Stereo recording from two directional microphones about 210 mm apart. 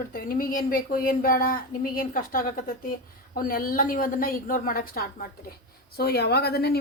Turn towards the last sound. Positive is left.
turn(degrees=50)  # may be behind; listen again after turning